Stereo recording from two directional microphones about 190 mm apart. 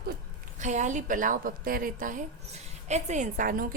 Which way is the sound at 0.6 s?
40° right (ahead or behind).